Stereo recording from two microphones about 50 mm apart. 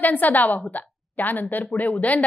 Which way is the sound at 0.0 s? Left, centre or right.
Left.